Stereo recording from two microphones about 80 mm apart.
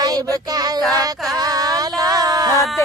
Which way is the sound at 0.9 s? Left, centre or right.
Right.